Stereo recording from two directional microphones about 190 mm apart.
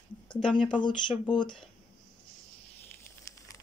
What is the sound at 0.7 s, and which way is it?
Speech, 25° left (ahead or behind).